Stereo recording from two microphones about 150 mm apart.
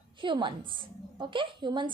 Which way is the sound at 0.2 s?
35° right (ahead or behind).